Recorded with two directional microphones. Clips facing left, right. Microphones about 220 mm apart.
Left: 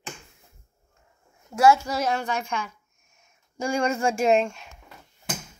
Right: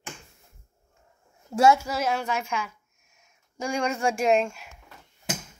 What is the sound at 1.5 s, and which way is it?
Speech, 25° right (ahead or behind).